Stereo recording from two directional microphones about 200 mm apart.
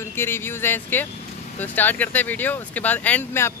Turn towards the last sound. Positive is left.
turn(degrees=10)  # may be behind; listen again after turning